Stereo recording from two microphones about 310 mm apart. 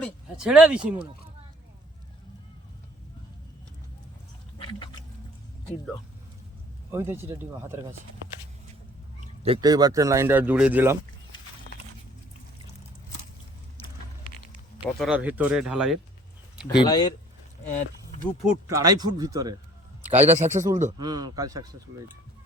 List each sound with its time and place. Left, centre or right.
0.0 s speech: centre
4.5 s a sound: centre
6.9 s speech: centre
9.2 s speech: centre
14.5 s speech: centre
16.8 s speech: centre
18.4 s speech: centre
20.0 s a sound: centre
20.2 s speech: right